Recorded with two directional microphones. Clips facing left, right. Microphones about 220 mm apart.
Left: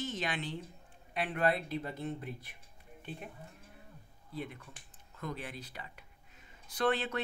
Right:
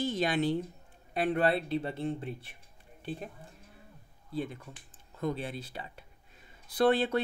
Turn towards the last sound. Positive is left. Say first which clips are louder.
# right 6 dB
turn(degrees=-35)  # may be behind; listen again after turning